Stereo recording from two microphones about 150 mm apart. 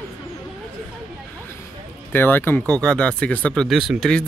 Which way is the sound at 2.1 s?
15° left (ahead or behind).